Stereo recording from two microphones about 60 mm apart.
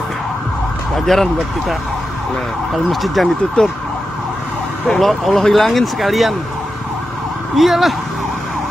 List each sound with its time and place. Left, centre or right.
0.9 s speech: centre
4.8 s speech: centre
7.5 s speech: centre